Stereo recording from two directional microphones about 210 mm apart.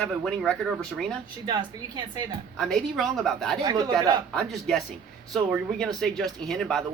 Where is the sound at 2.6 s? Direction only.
Centre (ahead or behind).